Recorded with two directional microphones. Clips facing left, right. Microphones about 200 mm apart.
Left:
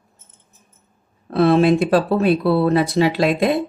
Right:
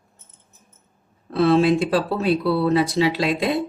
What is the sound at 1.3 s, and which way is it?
Speech, 55° left (ahead or behind).